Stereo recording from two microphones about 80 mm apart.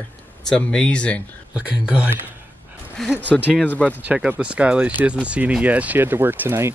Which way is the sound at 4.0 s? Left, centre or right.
Centre.